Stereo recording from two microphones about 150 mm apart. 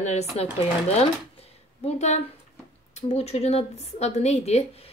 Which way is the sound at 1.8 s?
45° left (ahead or behind).